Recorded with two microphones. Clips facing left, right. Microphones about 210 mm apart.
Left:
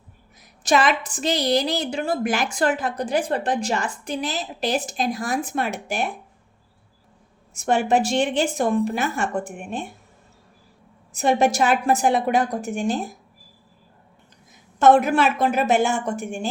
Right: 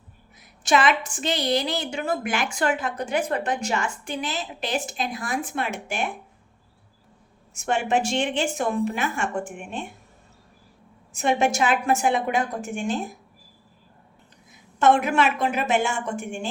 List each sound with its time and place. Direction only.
0.3 s a woman's voice: 40° left (ahead or behind)
7.5 s a woman's voice: 35° left (ahead or behind)
11.1 s a woman's voice: 40° left (ahead or behind)
14.8 s a woman's voice: 40° left (ahead or behind)